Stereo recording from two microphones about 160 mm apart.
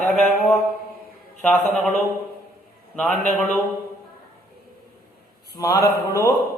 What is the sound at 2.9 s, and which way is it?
Speech, 10° left (ahead or behind).